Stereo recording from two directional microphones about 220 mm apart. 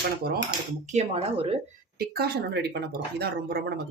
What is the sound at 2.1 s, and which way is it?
Speech, 45° right (ahead or behind).